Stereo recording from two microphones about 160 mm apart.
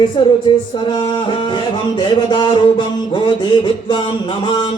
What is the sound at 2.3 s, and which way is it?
Music, 30° left (ahead or behind).